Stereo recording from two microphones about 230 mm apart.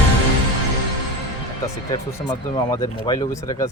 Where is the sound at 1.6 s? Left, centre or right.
Centre.